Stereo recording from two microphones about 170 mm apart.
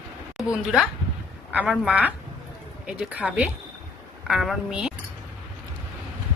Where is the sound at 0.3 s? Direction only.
5° right (ahead or behind).